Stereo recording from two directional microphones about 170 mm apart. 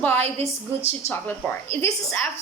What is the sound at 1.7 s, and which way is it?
Speech, 15° left (ahead or behind).